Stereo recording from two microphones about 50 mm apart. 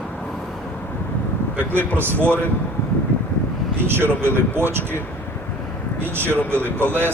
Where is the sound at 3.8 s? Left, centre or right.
Right.